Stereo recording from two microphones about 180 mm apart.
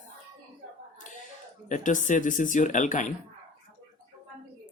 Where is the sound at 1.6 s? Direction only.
45° left (ahead or behind).